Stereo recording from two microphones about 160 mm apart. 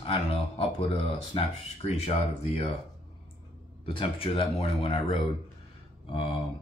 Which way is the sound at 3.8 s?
35° left (ahead or behind).